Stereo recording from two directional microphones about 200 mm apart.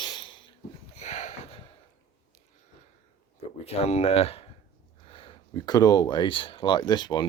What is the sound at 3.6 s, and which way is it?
Speech, 30° left (ahead or behind).